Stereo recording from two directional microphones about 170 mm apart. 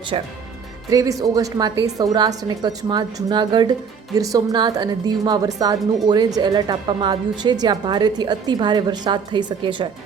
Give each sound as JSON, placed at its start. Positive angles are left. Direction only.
{"t": 0.1, "sound": "speech", "side_deg": -35}
{"t": 0.9, "sound": "a woman's voice", "side_deg": -20}